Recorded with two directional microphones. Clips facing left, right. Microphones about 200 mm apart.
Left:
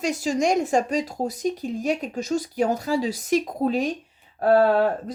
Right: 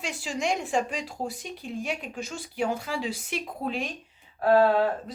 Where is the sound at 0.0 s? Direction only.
40° left (ahead or behind).